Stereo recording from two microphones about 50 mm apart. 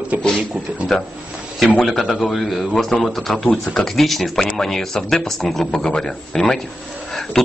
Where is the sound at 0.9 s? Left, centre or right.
Centre.